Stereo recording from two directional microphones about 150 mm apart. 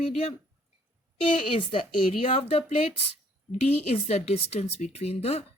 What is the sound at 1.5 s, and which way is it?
A woman's voice, 35° left (ahead or behind).